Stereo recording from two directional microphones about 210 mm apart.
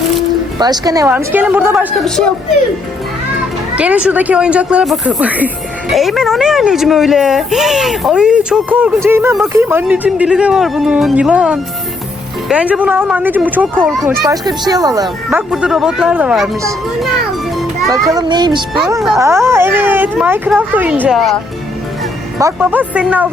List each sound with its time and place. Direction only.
0.6 s speech: 20° right (ahead or behind)
1.9 s speech: 5° left (ahead or behind)
3.8 s speech: 5° right (ahead or behind)
14.3 s speech: 20° right (ahead or behind); by 16.5 s 5° right (ahead or behind)
17.6 s music: centre (ahead or behind)
18.1 s speech: 20° right (ahead or behind); by 21.3 s centre (ahead or behind)
22.4 s speech: 10° right (ahead or behind)